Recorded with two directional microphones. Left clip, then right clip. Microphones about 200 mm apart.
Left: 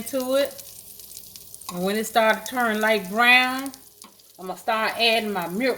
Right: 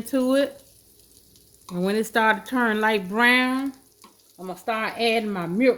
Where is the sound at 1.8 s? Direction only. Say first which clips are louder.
Left 1 dB; 55° right (ahead or behind).